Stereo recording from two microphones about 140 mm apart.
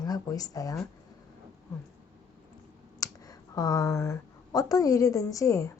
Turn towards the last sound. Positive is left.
turn(degrees=20)  # may be behind; listen again after turning